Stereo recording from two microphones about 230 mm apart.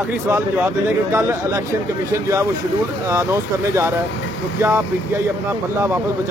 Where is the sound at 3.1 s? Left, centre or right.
Centre.